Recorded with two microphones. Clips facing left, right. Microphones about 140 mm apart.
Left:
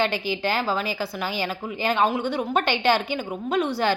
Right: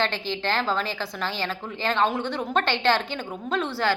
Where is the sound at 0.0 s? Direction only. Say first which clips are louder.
Left 3 dB; 10° left (ahead or behind).